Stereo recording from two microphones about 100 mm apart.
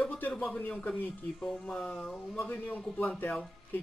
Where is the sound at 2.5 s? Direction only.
15° left (ahead or behind).